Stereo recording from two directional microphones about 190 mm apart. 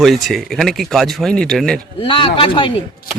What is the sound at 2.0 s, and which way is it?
Speech, 25° left (ahead or behind).